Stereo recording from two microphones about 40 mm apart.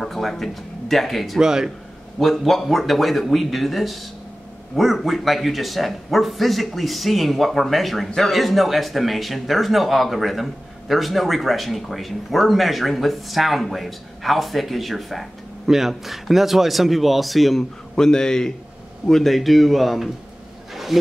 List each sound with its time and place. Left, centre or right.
0.0 s speech: centre
1.4 s a man's voice: centre
2.1 s a man's voice: centre
17.9 s a man's voice: centre
20.7 s roaring cats: centre